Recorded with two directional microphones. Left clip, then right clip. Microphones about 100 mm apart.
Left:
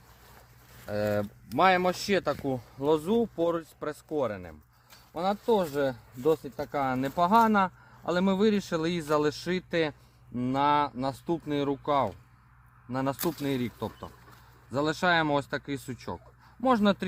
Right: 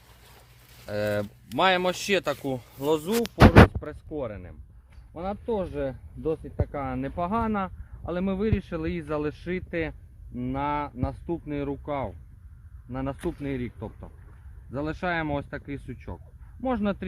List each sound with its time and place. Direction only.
0.9 s speech: 30° left (ahead or behind)
1.5 s speech: 50° left (ahead or behind)
3.8 s speech: 65° left (ahead or behind)
14.7 s speech: 45° left (ahead or behind)